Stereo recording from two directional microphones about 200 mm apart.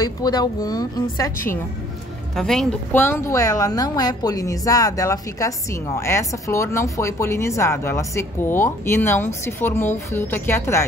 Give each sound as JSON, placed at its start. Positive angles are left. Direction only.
{"t": 0.0, "sound": "a woman's voice", "side_deg": 20}
{"t": 2.3, "sound": "a woman's voice", "side_deg": 0}